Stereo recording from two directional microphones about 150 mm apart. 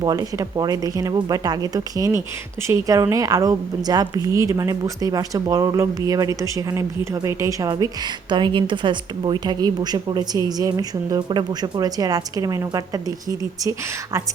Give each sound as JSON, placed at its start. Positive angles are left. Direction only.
{"t": 0.0, "sound": "a woman's voice", "side_deg": -25}